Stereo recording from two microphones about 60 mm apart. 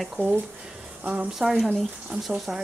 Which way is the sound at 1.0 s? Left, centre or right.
Right.